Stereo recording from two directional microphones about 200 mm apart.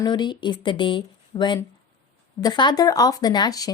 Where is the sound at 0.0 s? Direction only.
20° left (ahead or behind).